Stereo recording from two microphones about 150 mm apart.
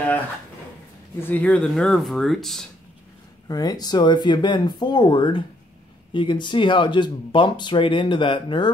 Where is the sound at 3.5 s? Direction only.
25° left (ahead or behind).